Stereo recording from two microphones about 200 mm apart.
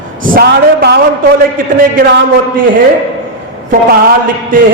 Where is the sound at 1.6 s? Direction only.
45° right (ahead or behind).